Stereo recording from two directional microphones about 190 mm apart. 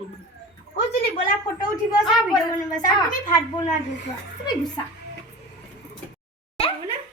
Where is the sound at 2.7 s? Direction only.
40° left (ahead or behind).